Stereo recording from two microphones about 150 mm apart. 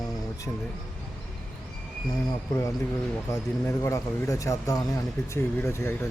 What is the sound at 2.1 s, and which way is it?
Speech, 25° left (ahead or behind).